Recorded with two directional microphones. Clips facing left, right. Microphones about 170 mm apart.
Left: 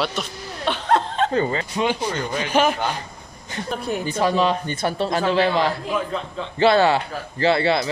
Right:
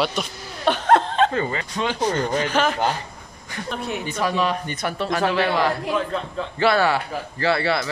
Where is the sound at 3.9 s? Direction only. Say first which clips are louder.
Left 4 dB; 30° left (ahead or behind).